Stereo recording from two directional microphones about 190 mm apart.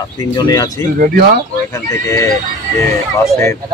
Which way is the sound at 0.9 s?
50° right (ahead or behind).